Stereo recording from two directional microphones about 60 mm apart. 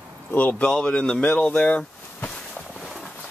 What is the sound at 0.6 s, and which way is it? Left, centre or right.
Speech, centre.